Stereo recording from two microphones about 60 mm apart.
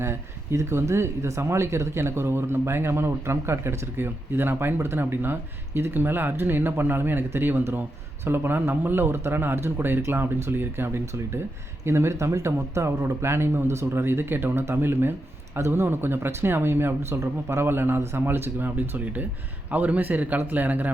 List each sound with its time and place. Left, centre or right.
0.0 s a man's voice: right